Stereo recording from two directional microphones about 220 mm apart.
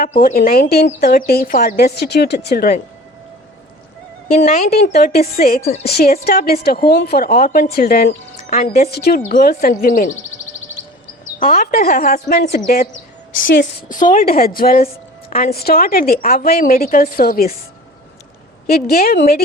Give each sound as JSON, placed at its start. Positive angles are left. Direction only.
{"t": 0.2, "sound": "speech", "side_deg": 40}
{"t": 4.9, "sound": "speech", "side_deg": 45}
{"t": 11.3, "sound": "speech", "side_deg": 40}
{"t": 13.8, "sound": "speech", "side_deg": 35}
{"t": 18.7, "sound": "speech", "side_deg": 45}